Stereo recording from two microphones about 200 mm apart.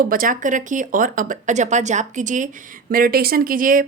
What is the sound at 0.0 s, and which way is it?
A woman's voice, 45° right (ahead or behind).